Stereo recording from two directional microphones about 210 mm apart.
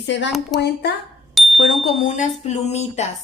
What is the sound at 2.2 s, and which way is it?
Speech, 30° left (ahead or behind).